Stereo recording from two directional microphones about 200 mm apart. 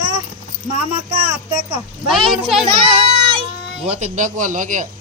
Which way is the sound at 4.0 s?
40° right (ahead or behind).